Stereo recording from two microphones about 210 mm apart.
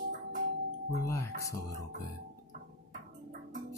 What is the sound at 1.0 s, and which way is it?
Speech, 15° left (ahead or behind).